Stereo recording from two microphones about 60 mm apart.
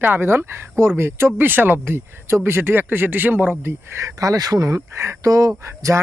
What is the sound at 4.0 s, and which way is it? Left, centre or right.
Speech, right.